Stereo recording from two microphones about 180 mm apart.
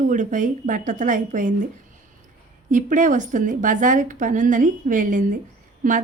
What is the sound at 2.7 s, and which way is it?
Speech, 45° right (ahead or behind).